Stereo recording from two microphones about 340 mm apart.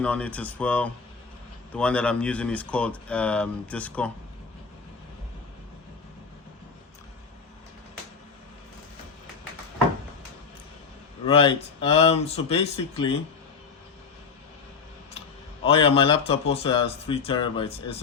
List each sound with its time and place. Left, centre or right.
0.0 s speech: centre
11.3 s speech: centre
15.6 s speech: centre